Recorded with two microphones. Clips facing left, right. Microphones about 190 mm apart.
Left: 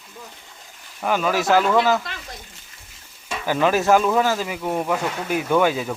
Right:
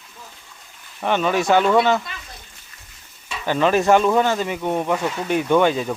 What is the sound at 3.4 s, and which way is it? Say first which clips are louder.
Speech: right 2 dB; 10° left (ahead or behind).